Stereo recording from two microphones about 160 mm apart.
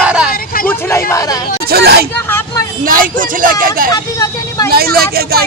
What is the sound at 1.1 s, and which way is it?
Speech, 20° left (ahead or behind).